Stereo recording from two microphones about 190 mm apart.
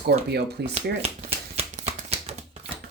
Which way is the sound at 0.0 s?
60° right (ahead or behind).